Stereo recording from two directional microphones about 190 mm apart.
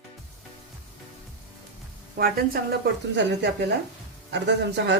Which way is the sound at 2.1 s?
50° right (ahead or behind).